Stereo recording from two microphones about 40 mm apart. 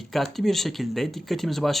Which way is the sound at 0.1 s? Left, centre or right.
Centre.